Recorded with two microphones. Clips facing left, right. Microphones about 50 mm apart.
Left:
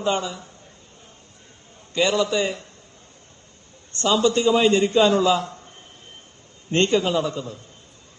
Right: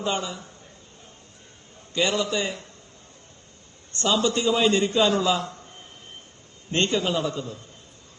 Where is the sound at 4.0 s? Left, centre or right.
Left.